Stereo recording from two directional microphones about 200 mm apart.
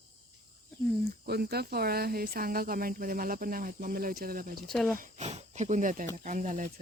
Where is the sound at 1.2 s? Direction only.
50° right (ahead or behind).